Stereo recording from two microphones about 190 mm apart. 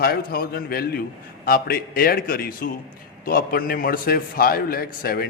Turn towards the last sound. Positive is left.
turn(degrees=50)  # may be behind; listen again after turning